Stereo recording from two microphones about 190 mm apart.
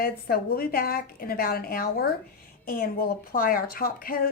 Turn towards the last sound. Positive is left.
turn(degrees=50)  # may be behind; listen again after turning